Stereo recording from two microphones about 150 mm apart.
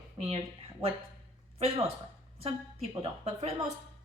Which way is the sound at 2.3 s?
40° right (ahead or behind).